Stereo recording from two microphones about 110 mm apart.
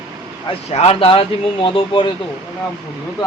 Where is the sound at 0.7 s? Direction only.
70° left (ahead or behind); by 2.1 s 50° left (ahead or behind).